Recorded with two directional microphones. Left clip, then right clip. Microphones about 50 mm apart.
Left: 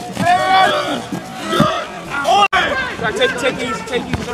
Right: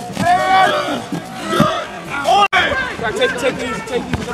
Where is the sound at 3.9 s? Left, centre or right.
Left.